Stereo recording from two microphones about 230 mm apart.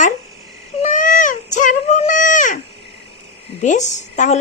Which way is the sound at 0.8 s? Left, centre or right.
Left.